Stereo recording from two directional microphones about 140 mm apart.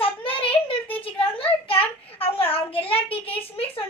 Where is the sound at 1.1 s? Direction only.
40° left (ahead or behind).